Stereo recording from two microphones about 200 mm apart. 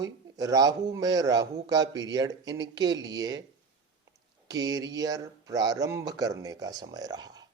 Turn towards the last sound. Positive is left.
turn(degrees=-20)  # may be behind; listen again after turning